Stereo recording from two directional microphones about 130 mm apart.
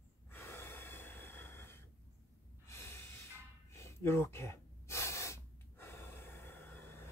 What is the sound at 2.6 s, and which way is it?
Snort, 20° left (ahead or behind).